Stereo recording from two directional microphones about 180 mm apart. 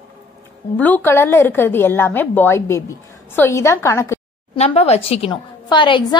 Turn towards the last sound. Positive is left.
turn(degrees=25)  # may be behind; listen again after turning